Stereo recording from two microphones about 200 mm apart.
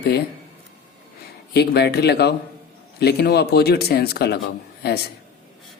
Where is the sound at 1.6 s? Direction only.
55° left (ahead or behind).